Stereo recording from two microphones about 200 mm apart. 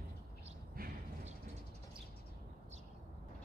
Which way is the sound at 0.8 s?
50° right (ahead or behind).